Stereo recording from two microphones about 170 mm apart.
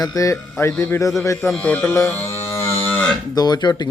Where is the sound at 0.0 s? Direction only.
20° left (ahead or behind).